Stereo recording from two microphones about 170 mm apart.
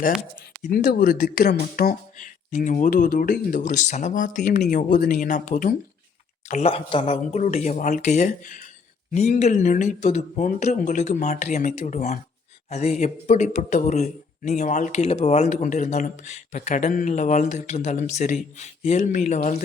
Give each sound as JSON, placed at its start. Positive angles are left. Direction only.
{"t": 0.6, "sound": "speech", "side_deg": 50}
{"t": 6.5, "sound": "speech", "side_deg": 35}